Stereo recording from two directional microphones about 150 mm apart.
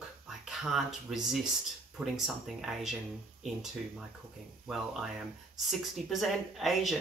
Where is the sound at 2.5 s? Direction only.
Centre (ahead or behind).